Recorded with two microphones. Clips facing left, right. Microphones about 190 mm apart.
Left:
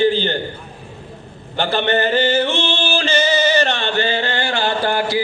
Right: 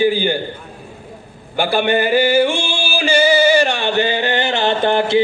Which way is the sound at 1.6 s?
10° right (ahead or behind).